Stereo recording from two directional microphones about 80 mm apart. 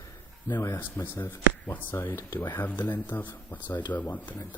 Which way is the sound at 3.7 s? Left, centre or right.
Left.